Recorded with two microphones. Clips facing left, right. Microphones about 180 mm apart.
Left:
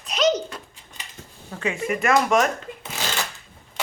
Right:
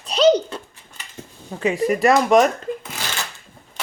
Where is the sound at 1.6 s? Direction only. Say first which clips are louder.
Right 6 dB; 35° right (ahead or behind).